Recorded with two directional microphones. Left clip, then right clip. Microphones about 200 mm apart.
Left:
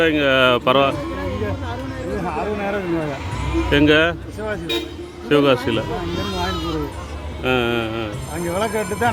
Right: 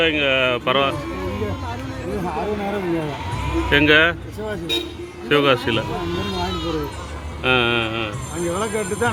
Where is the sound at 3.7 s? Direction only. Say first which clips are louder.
Right 1 dB; 20° left (ahead or behind).